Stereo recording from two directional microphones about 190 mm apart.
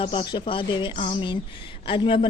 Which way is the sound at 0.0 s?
25° left (ahead or behind).